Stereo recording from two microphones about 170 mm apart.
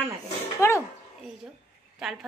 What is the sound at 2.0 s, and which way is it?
Speech, centre (ahead or behind).